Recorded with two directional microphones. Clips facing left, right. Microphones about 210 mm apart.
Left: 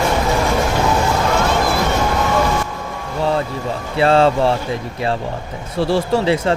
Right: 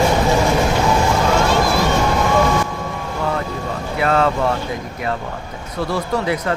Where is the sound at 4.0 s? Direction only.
30° left (ahead or behind).